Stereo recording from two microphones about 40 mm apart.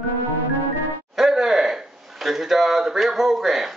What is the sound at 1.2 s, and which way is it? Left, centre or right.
Speech, centre.